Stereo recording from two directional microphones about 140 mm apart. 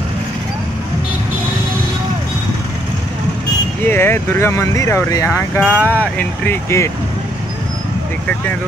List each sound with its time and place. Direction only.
3.8 s speech: 15° left (ahead or behind)